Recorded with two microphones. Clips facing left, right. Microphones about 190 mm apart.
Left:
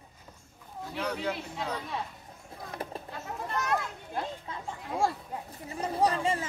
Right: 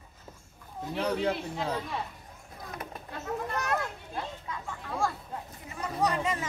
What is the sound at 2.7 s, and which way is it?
Speech, 30° left (ahead or behind).